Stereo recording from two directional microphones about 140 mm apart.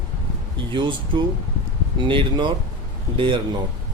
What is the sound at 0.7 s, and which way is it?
Speech, 35° right (ahead or behind).